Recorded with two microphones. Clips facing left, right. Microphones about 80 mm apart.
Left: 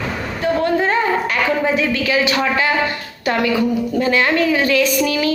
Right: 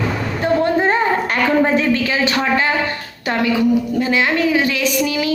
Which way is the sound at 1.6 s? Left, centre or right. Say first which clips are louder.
Right 2 dB; right.